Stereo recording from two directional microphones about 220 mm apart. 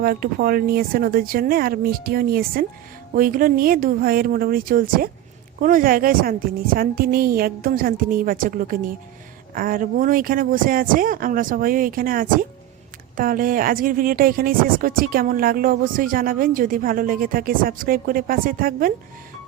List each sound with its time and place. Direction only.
0.0 s speech: 40° right (ahead or behind)